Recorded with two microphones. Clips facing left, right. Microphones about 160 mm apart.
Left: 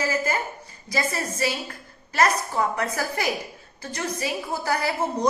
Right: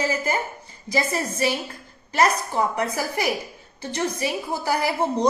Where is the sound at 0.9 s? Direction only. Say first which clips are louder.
Right 3 dB; 20° right (ahead or behind).